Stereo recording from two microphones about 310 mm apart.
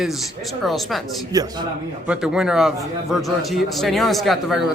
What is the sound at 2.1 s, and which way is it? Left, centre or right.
A man's voice, centre.